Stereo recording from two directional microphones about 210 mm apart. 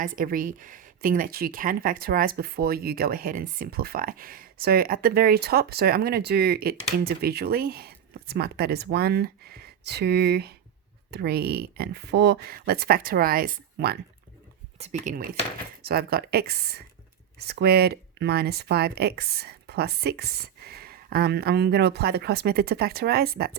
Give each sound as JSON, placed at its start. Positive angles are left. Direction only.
{"t": 0.2, "sound": "speech", "side_deg": -40}
{"t": 14.8, "sound": "speech", "side_deg": -35}